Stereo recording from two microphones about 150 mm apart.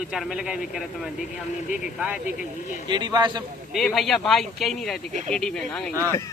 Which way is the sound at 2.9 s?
30° right (ahead or behind).